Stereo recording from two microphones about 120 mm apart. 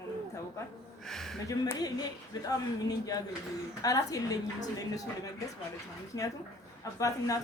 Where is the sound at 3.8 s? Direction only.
30° left (ahead or behind).